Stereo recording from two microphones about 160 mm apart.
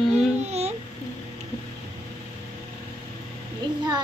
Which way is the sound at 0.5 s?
40° right (ahead or behind).